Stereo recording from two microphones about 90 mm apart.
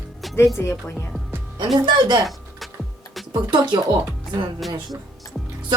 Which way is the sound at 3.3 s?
55° right (ahead or behind).